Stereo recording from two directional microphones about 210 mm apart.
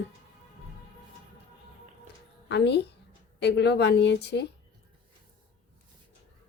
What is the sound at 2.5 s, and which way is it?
A woman's voice, 55° left (ahead or behind).